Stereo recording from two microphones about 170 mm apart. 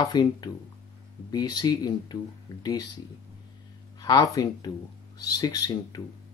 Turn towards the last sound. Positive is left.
turn(degrees=20)  # may be behind; listen again after turning